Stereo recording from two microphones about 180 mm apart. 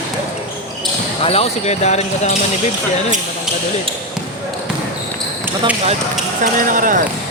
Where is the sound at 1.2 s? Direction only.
35° left (ahead or behind).